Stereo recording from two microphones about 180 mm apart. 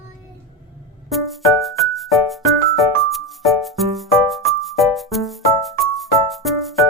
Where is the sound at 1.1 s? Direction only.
Centre (ahead or behind).